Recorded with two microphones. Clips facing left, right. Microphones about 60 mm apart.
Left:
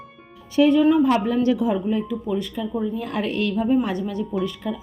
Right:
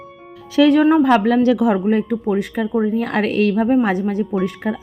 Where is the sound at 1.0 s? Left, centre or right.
Right.